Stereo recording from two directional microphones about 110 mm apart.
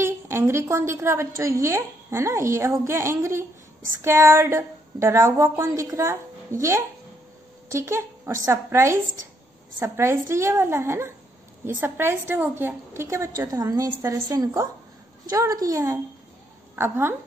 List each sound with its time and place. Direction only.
0.0 s a woman's voice: 25° right (ahead or behind)
7.7 s a woman's voice: 25° right (ahead or behind)
16.7 s a woman's voice: 20° right (ahead or behind)